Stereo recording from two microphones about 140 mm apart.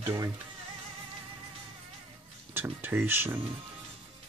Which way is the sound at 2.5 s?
15° right (ahead or behind).